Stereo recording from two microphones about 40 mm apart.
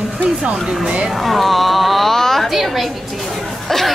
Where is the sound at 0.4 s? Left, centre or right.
Right.